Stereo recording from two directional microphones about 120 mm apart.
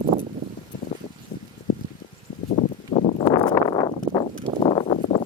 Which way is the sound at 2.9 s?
90° left.